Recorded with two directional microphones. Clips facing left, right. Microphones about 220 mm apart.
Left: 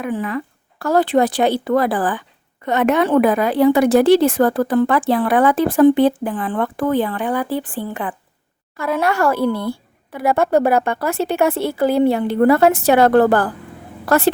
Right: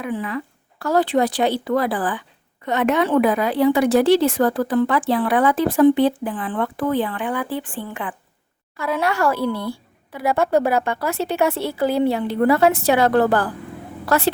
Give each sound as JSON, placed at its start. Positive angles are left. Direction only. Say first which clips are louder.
{"t": 0.0, "sound": "a woman's voice", "louder": "left 3 dB", "side_deg": 50}
{"t": 8.8, "sound": "a woman's voice", "louder": "left 3 dB", "side_deg": 50}